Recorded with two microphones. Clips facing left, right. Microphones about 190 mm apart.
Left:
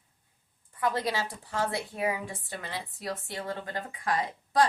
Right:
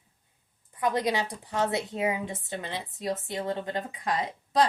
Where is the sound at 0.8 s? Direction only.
20° right (ahead or behind).